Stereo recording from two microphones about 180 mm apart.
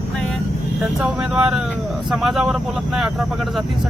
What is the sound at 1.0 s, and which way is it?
Speech, 5° right (ahead or behind).